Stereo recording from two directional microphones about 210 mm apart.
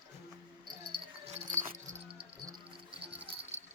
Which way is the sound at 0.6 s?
25° right (ahead or behind).